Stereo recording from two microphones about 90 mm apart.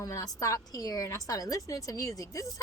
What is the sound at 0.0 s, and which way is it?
Speech, 40° left (ahead or behind).